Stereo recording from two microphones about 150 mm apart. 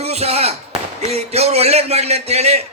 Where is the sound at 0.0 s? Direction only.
45° right (ahead or behind).